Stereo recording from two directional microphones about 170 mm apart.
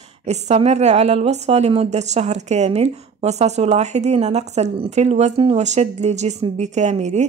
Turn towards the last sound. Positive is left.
turn(degrees=-45)  # may be behind; listen again after turning